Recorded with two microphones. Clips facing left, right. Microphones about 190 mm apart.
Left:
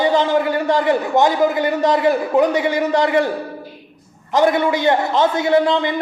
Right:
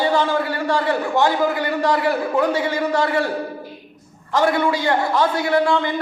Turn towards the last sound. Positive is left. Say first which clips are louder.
# left 3 dB
turn(degrees=20)  # may be behind; listen again after turning